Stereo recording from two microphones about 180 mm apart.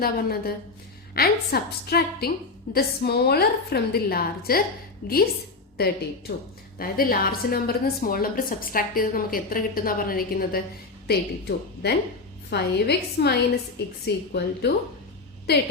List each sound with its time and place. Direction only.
0.0 s a woman's voice: 55° left (ahead or behind)